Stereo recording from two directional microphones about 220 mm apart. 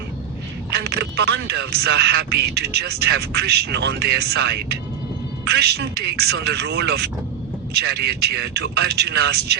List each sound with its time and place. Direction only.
0.7 s speech: 50° right (ahead or behind)